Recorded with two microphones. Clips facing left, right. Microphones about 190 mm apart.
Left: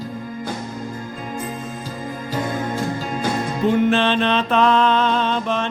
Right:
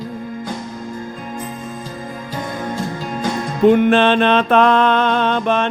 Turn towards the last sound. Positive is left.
turn(degrees=-60)  # may be behind; listen again after turning